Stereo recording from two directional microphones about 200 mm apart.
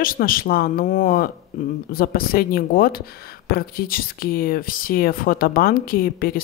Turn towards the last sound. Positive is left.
turn(degrees=45)  # may be behind; listen again after turning